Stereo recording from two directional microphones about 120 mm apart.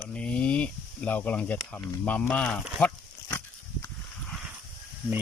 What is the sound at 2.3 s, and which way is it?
Speech, 10° left (ahead or behind).